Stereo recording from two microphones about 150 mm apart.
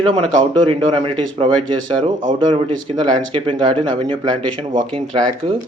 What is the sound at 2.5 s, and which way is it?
Speech, 35° right (ahead or behind).